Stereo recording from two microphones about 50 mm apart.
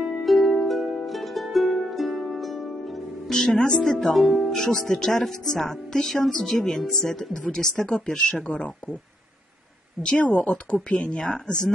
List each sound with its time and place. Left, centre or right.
0.2 s music: centre
3.3 s speech: centre
7.9 s speech: left
10.2 s speech: left; by 11.5 s centre